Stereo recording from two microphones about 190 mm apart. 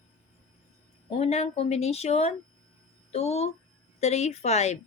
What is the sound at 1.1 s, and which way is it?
Speech, 35° left (ahead or behind).